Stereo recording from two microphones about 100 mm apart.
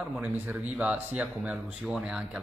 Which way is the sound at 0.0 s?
15° right (ahead or behind).